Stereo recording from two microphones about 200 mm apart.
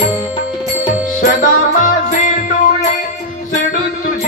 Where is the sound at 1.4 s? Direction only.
40° left (ahead or behind).